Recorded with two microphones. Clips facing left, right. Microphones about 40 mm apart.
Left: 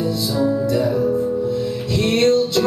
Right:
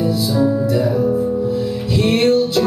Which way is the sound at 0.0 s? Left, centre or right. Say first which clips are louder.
Right 3 dB; centre.